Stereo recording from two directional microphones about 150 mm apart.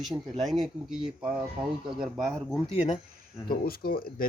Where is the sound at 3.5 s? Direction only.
80° left.